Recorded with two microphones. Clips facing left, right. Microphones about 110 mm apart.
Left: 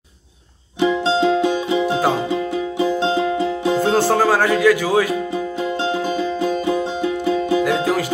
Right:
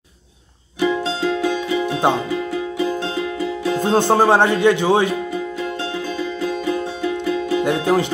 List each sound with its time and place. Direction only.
0.7 s music: 25° left (ahead or behind)
3.8 s speech: 25° right (ahead or behind)
5.6 s music: 25° left (ahead or behind)
7.6 s music: 25° right (ahead or behind)